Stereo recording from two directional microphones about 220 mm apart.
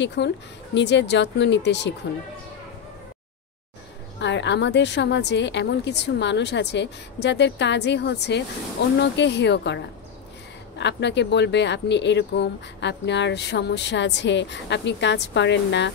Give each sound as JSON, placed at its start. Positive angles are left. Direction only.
{"t": 0.0, "sound": "speech", "side_deg": 50}
{"t": 4.2, "sound": "speech", "side_deg": 55}